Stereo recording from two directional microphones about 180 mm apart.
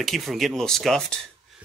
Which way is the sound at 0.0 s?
Centre (ahead or behind).